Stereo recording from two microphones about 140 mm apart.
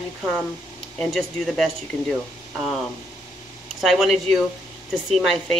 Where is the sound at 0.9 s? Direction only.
Centre (ahead or behind).